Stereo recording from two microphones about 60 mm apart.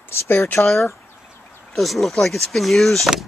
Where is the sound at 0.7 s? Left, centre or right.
Centre.